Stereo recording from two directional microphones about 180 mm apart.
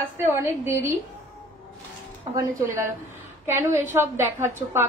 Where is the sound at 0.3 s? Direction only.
15° right (ahead or behind).